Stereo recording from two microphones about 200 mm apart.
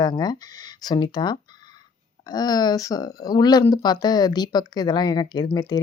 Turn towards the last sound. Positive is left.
turn(degrees=20)  # may be behind; listen again after turning